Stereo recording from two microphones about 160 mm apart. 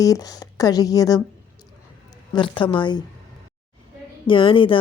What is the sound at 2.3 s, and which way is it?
Speech, 30° left (ahead or behind).